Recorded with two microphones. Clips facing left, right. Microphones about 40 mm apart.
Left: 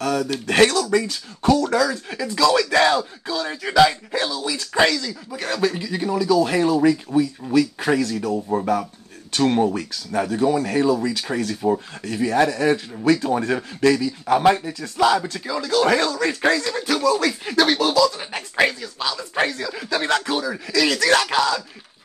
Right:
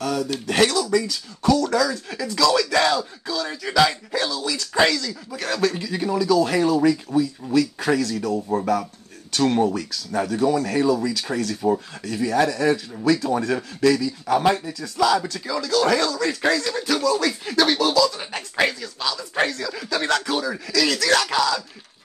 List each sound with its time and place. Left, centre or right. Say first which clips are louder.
0.0 s a sound: left 2 dB; left
0.5 s speech: left 3 dB; left; by 8.4 s centre
8.4 s speech: left 1 dB; centre; by 15.1 s left
15.2 s speech: left 1 dB; centre
16.6 s speech: left 1 dB; centre
20.2 s speech: left 1 dB; centre
20.7 s speech: left 2 dB; left